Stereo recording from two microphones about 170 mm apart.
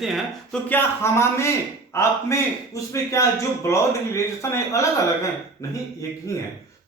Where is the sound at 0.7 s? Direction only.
15° left (ahead or behind).